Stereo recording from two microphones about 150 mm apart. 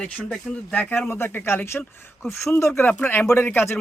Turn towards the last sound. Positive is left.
turn(degrees=15)  # may be behind; listen again after turning